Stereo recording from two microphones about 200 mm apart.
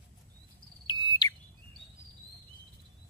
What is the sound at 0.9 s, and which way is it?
Smoke detector, 20° left (ahead or behind).